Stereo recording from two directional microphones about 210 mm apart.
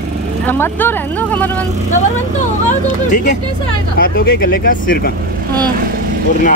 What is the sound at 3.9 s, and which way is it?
Speech, 45° left (ahead or behind).